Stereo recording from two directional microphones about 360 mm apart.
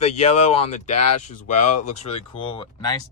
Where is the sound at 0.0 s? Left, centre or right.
Centre.